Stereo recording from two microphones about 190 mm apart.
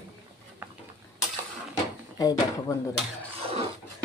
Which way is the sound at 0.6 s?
10° right (ahead or behind).